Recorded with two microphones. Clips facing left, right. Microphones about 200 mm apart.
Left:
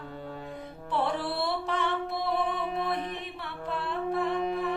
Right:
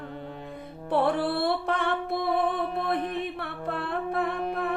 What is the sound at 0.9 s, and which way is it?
Music, 60° right (ahead or behind).